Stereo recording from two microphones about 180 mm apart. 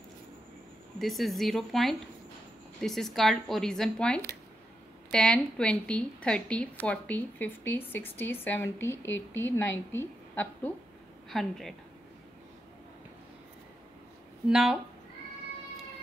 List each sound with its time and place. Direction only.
0.9 s a woman's voice: centre (ahead or behind)
14.5 s speech: 5° right (ahead or behind)